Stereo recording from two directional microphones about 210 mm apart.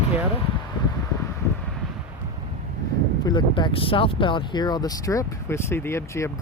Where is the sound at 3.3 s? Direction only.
20° left (ahead or behind).